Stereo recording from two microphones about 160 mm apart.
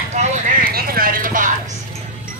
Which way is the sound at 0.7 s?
70° right (ahead or behind).